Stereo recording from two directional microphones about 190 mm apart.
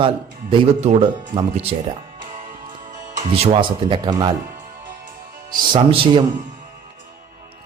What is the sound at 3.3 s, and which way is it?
A man's voice, 30° right (ahead or behind).